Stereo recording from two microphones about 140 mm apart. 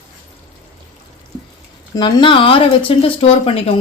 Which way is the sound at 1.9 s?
30° left (ahead or behind).